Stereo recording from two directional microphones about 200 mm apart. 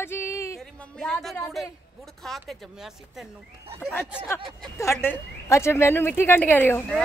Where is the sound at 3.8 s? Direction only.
10° left (ahead or behind).